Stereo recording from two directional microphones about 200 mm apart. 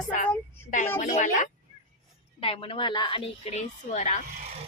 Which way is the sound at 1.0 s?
40° left (ahead or behind).